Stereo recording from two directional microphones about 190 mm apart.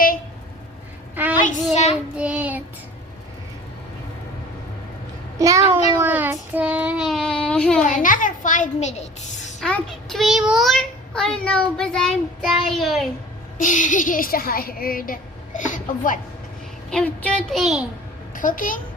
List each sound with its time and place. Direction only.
1.1 s a sound: 10° right (ahead or behind)
1.7 s child singing: 35° left (ahead or behind)
2.1 s child singing: 5° right (ahead or behind)
5.4 s a child's voice: 15° right (ahead or behind)
6.0 s child singing: 10° right (ahead or behind)
7.9 s a sound: 45° left (ahead or behind)
9.6 s a child's voice: 5° left (ahead or behind)
13.6 s a woman's voice: 40° left (ahead or behind)
16.9 s a woman's voice: 5° left (ahead or behind)
18.3 s a child's voice: 45° left (ahead or behind)